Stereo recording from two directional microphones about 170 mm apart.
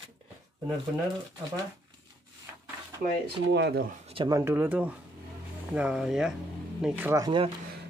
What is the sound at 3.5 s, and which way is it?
Speech, 80° right.